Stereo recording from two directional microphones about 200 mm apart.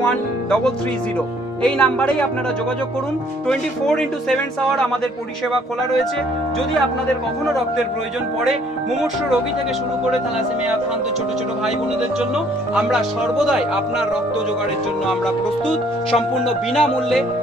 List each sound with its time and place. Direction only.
0.0 s speech: 5° left (ahead or behind)
3.4 s speech: 5° left (ahead or behind)
12.7 s speech: centre (ahead or behind)
16.1 s speech: centre (ahead or behind)